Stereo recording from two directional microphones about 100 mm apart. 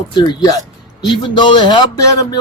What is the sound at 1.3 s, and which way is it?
Speech, 50° left (ahead or behind).